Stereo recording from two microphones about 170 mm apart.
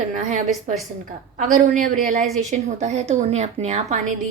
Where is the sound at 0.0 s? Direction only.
45° right (ahead or behind).